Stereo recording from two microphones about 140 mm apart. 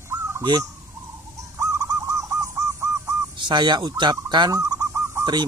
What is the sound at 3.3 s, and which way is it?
Speech, 35° right (ahead or behind).